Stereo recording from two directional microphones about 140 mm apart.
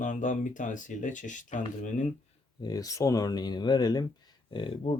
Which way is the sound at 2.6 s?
25° left (ahead or behind).